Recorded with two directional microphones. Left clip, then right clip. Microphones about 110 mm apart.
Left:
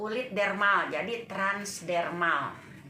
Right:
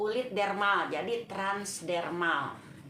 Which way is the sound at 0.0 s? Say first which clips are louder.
Left 1 dB; 35° right (ahead or behind).